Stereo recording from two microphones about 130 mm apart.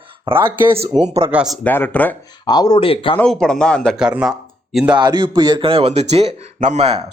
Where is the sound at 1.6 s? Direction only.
15° left (ahead or behind).